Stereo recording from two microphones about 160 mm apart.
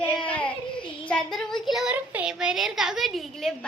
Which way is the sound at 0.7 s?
30° left (ahead or behind).